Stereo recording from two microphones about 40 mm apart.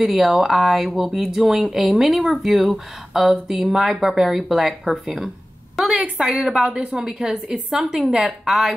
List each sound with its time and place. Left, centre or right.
0.0 s speech: centre
5.9 s a woman's voice: right
6.1 s a woman's voice: centre
6.7 s a woman's voice: right
7.1 s speech: centre